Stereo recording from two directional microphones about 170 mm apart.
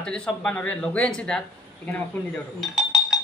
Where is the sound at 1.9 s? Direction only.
5° left (ahead or behind).